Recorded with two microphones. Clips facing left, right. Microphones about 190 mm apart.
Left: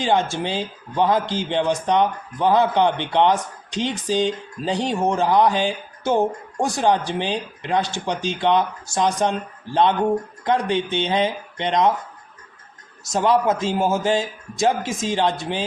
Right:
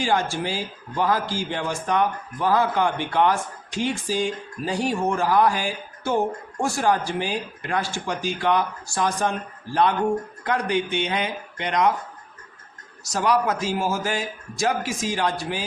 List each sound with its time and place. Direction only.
0.0 s a man's voice: 20° left (ahead or behind)
10.4 s a man's voice: 25° left (ahead or behind)
13.1 s a man's voice: 25° left (ahead or behind)